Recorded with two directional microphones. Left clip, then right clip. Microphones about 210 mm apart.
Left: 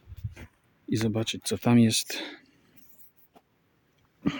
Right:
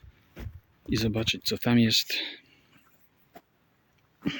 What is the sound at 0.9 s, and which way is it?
Speech, 15° left (ahead or behind).